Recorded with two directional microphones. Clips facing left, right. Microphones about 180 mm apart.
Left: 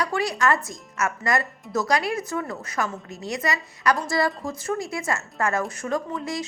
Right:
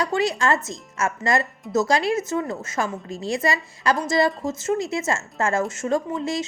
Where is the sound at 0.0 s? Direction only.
25° right (ahead or behind).